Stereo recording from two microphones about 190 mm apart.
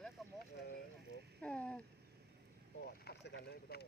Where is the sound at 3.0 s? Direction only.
60° left (ahead or behind).